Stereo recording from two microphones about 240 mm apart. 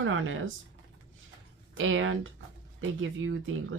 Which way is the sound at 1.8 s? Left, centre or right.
Right.